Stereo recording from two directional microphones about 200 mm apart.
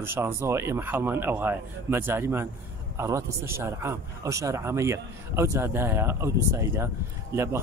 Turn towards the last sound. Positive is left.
turn(degrees=-15)  # may be behind; listen again after turning